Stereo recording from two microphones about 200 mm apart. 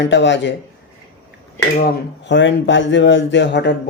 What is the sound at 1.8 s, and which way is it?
A man's voice, 60° left (ahead or behind).